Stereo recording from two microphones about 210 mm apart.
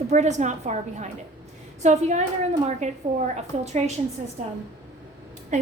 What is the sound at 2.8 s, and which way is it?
Speech, 35° right (ahead or behind).